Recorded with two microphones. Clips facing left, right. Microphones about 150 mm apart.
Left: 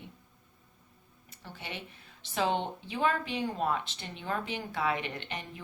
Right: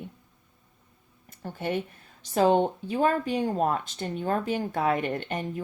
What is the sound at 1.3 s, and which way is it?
A woman's voice, 45° right (ahead or behind).